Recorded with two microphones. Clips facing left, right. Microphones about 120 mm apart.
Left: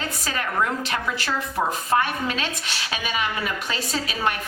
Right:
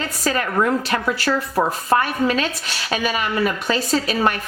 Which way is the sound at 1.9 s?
45° right (ahead or behind).